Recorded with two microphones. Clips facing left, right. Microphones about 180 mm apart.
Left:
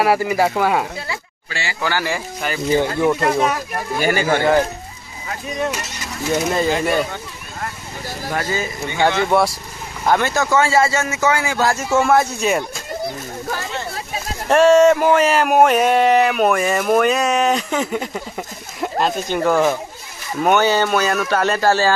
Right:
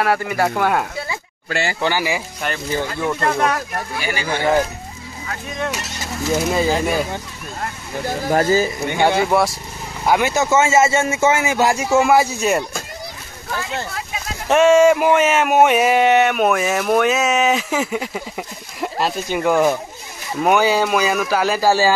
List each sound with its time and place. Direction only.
0.0 s speech: 10° left (ahead or behind)
1.5 s speech: 50° right (ahead or behind)
1.8 s speech: 15° right (ahead or behind)
2.7 s speech: 15° left (ahead or behind)
4.0 s speech: 45° left (ahead or behind)
6.3 s speech: 5° right (ahead or behind)
8.4 s speech: 35° right (ahead or behind)
8.9 s speech: 10° right (ahead or behind)
14.5 s speech: 5° right (ahead or behind)